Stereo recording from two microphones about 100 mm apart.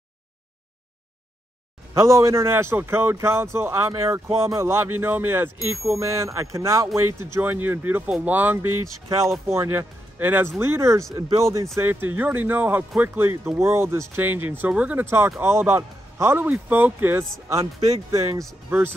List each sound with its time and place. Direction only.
2.0 s a man's voice: 30° right (ahead or behind)
17.7 s speech: 90° right
18.1 s speech: 30° right (ahead or behind)
18.7 s a man's voice: 20° right (ahead or behind)